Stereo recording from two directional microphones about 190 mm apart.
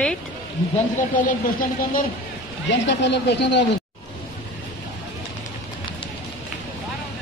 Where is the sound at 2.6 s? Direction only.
70° left (ahead or behind).